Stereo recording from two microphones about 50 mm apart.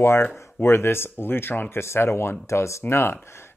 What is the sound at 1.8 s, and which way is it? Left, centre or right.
Speech, left.